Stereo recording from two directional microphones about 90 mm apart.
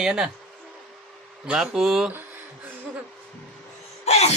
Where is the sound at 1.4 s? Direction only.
10° right (ahead or behind).